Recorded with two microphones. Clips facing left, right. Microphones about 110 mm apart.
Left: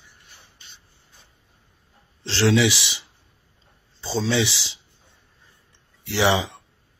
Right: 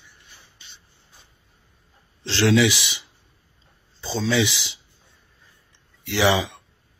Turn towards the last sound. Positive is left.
turn(degrees=30)  # may be behind; listen again after turning